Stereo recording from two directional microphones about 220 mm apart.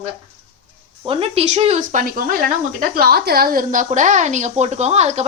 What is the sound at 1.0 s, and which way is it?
A woman's voice, 25° right (ahead or behind).